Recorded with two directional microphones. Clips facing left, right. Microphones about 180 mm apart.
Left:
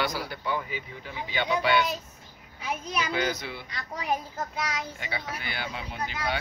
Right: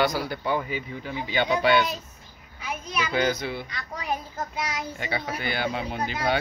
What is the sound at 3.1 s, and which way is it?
Speech, 40° right (ahead or behind).